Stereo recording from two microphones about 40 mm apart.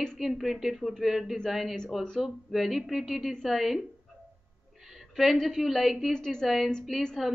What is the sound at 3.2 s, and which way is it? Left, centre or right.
Speech, centre.